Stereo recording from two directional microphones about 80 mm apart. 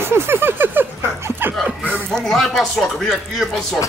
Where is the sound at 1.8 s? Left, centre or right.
Centre.